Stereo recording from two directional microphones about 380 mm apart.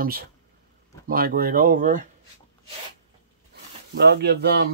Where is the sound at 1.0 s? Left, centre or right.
Right.